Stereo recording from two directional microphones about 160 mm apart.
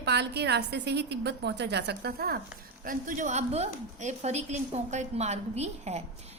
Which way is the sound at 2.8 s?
55° right (ahead or behind).